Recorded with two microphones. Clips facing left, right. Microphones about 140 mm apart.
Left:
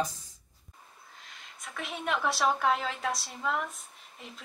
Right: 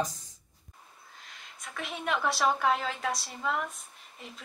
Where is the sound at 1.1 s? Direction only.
Centre (ahead or behind).